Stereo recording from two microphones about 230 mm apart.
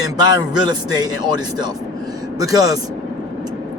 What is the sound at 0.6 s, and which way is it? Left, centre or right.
Speech, centre.